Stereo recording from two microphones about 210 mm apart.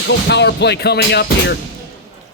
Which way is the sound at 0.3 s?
55° left (ahead or behind).